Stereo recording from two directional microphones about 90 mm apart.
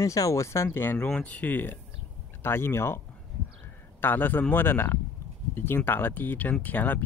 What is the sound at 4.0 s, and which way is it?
Speech, 20° left (ahead or behind).